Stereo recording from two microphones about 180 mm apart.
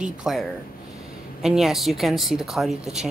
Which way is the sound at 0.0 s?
Centre (ahead or behind).